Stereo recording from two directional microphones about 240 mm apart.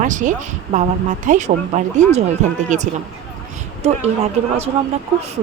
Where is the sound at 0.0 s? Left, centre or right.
Right.